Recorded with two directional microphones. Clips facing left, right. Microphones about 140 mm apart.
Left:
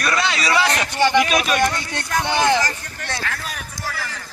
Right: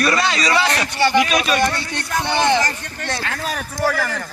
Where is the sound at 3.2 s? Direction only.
25° right (ahead or behind).